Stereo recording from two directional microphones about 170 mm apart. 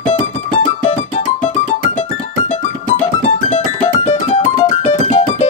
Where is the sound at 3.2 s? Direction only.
40° left (ahead or behind).